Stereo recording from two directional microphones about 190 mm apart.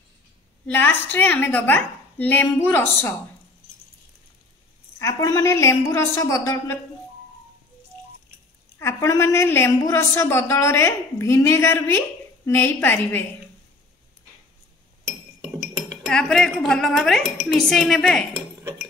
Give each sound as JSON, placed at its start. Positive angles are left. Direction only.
{"t": 0.7, "sound": "a woman's voice", "side_deg": 10}
{"t": 4.9, "sound": "a woman's voice", "side_deg": 15}
{"t": 8.7, "sound": "a woman's voice", "side_deg": 15}
{"t": 16.1, "sound": "speech", "side_deg": 5}